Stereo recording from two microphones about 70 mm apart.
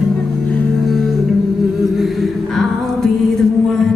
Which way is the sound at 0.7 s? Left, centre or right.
Centre.